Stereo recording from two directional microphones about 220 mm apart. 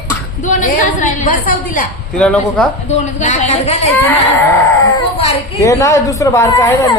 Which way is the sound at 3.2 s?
30° left (ahead or behind).